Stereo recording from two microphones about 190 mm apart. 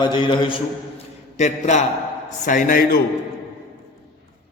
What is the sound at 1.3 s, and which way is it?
A man's voice, 40° left (ahead or behind).